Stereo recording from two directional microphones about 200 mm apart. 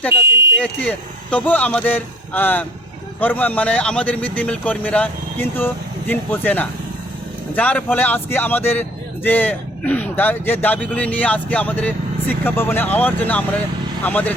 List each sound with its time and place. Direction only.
0.6 s speech: 5° left (ahead or behind)